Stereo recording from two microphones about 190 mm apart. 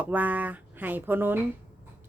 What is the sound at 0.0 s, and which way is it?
Speech, 10° right (ahead or behind).